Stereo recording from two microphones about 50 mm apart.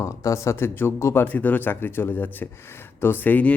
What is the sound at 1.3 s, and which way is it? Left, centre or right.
A man's voice, left.